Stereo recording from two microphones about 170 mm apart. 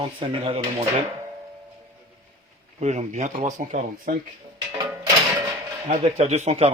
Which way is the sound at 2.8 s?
40° right (ahead or behind).